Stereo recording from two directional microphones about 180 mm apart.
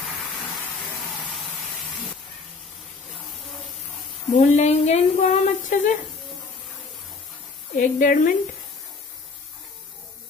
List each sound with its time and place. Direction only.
4.3 s speech: 40° left (ahead or behind)
7.7 s a woman's voice: 50° left (ahead or behind)